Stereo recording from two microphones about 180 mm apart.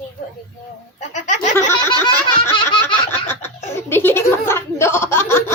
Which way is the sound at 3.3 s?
15° left (ahead or behind).